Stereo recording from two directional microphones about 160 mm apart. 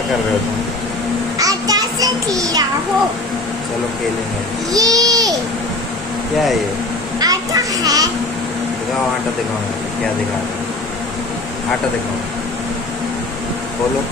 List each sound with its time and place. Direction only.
1.4 s a child's voice: 20° right (ahead or behind)
4.7 s a child's voice: 20° right (ahead or behind)
7.2 s a child's voice: 25° right (ahead or behind)